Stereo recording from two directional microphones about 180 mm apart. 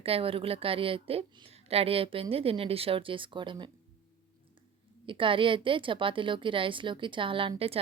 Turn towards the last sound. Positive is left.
turn(degrees=-30)  # may be behind; listen again after turning